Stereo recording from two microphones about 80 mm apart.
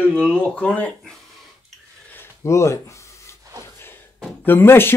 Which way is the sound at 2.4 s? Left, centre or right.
Left.